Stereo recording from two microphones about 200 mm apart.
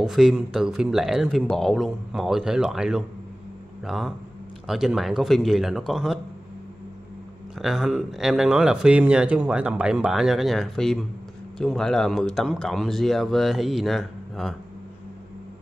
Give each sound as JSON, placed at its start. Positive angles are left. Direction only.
{"t": 0.0, "sound": "speech", "side_deg": 0}
{"t": 7.5, "sound": "speech", "side_deg": 0}